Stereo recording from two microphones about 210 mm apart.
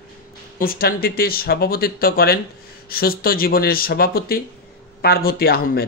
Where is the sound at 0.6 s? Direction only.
45° left (ahead or behind).